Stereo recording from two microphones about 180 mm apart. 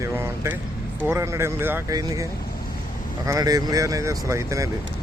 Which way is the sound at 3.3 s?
20° right (ahead or behind).